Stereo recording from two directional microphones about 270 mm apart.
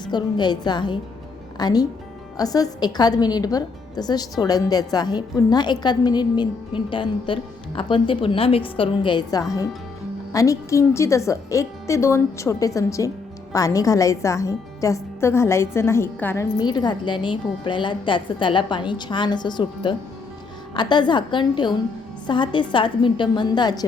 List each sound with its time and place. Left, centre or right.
0.0 s a woman's voice: centre